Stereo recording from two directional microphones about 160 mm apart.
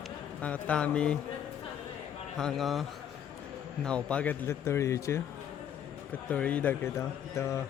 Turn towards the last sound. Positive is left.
turn(degrees=20)  # may be behind; listen again after turning